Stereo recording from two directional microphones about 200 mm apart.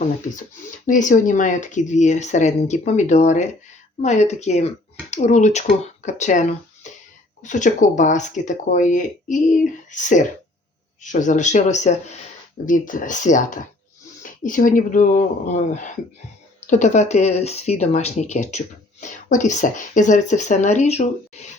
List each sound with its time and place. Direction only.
0.9 s speech: 40° left (ahead or behind)